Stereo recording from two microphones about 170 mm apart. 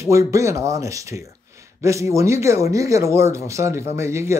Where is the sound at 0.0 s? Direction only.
15° right (ahead or behind).